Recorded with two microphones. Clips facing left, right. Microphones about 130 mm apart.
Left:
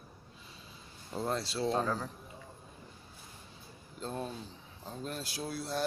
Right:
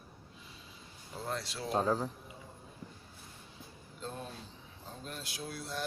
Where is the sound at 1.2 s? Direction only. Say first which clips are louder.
Left 5 dB; 30° left (ahead or behind).